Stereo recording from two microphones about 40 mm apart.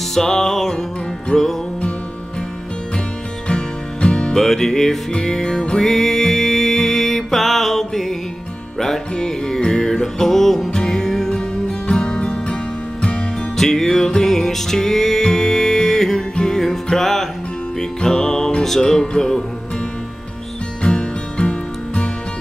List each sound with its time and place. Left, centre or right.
0.1 s music: centre
3.4 s music: left
4.4 s music: centre
5.8 s music: centre
11.9 s music: left
13.6 s music: centre
20.8 s music: left